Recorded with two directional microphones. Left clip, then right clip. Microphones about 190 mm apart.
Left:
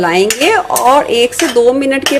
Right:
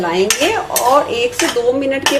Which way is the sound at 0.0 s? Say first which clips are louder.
Left 5 dB; 35° left (ahead or behind).